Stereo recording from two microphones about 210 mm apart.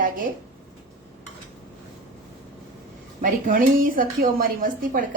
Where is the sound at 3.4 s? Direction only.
40° right (ahead or behind).